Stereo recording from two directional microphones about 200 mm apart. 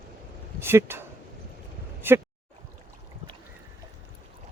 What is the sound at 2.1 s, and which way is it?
Speech, 10° right (ahead or behind).